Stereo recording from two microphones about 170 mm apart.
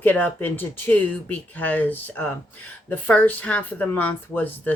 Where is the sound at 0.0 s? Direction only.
10° left (ahead or behind).